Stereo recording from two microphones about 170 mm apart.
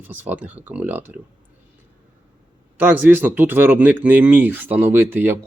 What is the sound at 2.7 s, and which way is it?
Speech, 10° right (ahead or behind).